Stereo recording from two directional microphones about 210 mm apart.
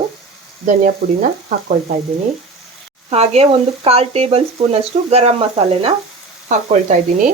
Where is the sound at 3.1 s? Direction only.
30° right (ahead or behind).